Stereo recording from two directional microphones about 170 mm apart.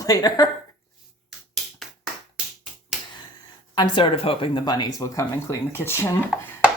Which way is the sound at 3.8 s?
30° left (ahead or behind).